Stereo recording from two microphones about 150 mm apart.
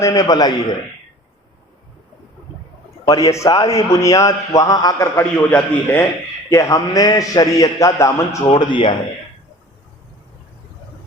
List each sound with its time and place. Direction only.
0.0 s a man's voice: 25° left (ahead or behind)
3.1 s a man's voice: 20° left (ahead or behind)
5.1 s a man's voice: 10° left (ahead or behind)
6.5 s a man's voice: 20° left (ahead or behind)
8.4 s speech: 35° left (ahead or behind)